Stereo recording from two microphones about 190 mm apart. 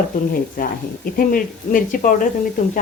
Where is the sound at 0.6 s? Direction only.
50° left (ahead or behind).